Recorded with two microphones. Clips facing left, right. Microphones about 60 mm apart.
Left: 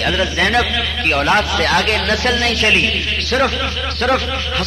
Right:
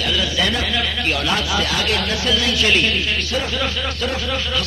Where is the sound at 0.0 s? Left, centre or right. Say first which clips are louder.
Left 4 dB; left.